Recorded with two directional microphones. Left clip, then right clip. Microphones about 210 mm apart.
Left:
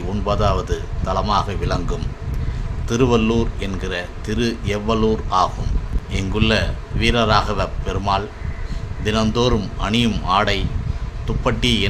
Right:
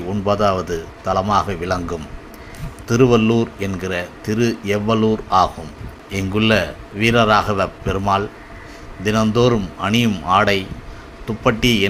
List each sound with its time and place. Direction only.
0.1 s a man's voice: 10° right (ahead or behind)